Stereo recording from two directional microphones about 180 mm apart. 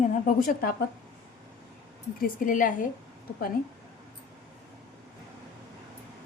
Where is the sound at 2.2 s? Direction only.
45° left (ahead or behind).